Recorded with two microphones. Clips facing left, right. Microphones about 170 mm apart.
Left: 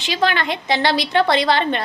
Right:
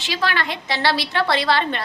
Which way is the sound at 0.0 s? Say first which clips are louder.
Left 4 dB; 20° left (ahead or behind).